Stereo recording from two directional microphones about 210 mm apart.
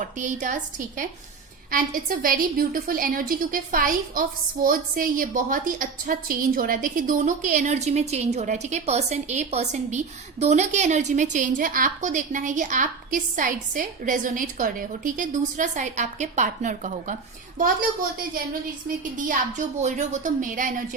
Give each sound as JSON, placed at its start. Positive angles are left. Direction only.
{"t": 0.0, "sound": "a woman's voice", "side_deg": -35}
{"t": 19.3, "sound": "a woman's voice", "side_deg": -35}